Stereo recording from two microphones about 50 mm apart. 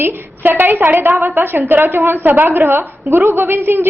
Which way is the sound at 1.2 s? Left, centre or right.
Right.